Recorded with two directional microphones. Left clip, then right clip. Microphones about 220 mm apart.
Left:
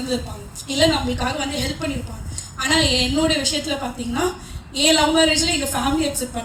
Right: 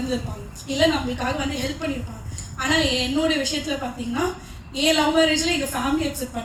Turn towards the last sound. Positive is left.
turn(degrees=45)  # may be behind; listen again after turning